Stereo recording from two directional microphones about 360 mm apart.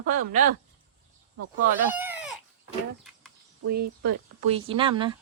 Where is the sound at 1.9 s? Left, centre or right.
Centre.